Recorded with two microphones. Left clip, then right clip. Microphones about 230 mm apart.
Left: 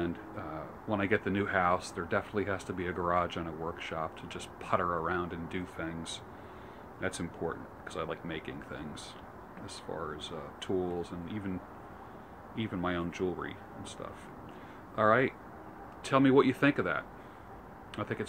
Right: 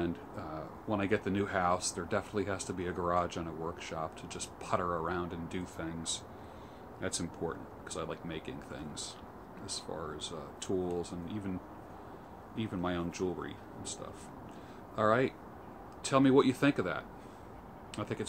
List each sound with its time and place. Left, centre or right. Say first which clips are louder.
0.0 s speech: left 1 dB; centre
12.5 s speech: left 2 dB; centre
15.0 s speech: left 3 dB; centre